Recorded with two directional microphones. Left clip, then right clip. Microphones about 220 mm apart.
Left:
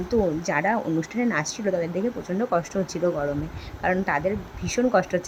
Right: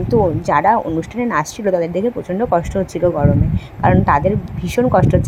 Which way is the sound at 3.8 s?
15° right (ahead or behind).